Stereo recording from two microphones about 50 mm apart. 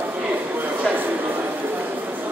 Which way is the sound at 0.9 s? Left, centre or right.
Centre.